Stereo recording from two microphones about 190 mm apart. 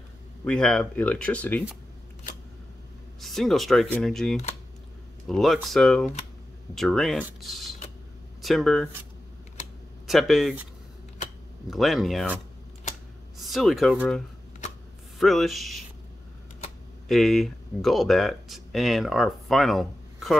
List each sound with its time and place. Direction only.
0.5 s speech: 5° left (ahead or behind)
3.2 s speech: centre (ahead or behind)
10.0 s speech: centre (ahead or behind)
11.7 s speech: centre (ahead or behind)
13.4 s speech: centre (ahead or behind)
17.1 s speech: centre (ahead or behind)